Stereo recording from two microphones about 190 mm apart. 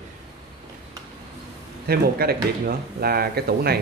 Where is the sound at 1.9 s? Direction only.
55° right (ahead or behind).